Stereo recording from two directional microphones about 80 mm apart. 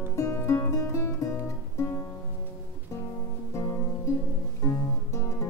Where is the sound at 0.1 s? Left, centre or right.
Left.